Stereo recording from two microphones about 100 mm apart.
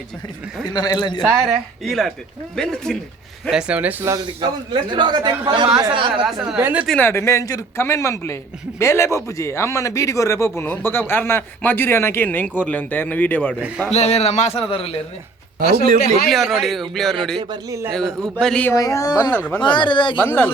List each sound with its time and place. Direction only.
0.7 s a man's voice: 45° left (ahead or behind)
1.2 s speech: centre (ahead or behind)
3.5 s speech: 10° right (ahead or behind)
4.4 s a man's voice: 55° right (ahead or behind)
6.2 s speech: 5° right (ahead or behind)
6.6 s speech: 15° right (ahead or behind)
7.0 s speech: 30° left (ahead or behind)
13.6 s speech: 15° right (ahead or behind)
13.9 s a man's voice: 90° left; by 14.9 s 70° left (ahead or behind)
16.3 s speech: centre (ahead or behind)
18.7 s speech: 30° left (ahead or behind)
19.3 s speech: 20° left (ahead or behind)
19.7 s speech: 55° left (ahead or behind)
20.1 s speech: 20° left (ahead or behind)